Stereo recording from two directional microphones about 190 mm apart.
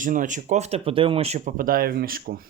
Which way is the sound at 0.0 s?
45° right (ahead or behind).